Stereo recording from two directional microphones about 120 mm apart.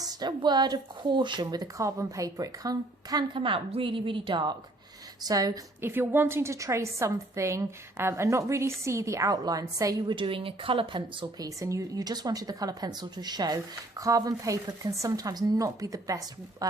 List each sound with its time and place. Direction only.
0.0 s speech: 35° right (ahead or behind)
3.3 s a woman's voice: 45° right (ahead or behind)
5.2 s speech: 30° right (ahead or behind)
5.8 s a woman's voice: 20° right (ahead or behind)
10.2 s speech: 45° right (ahead or behind); by 16.6 s 30° right (ahead or behind)